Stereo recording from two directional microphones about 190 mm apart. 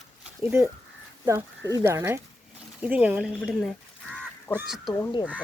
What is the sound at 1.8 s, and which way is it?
Speech, 15° right (ahead or behind).